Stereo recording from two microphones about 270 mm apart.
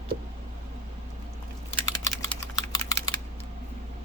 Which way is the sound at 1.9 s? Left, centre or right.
Centre.